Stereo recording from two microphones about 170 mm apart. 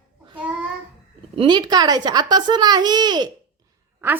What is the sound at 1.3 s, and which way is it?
A child's voice, 25° right (ahead or behind).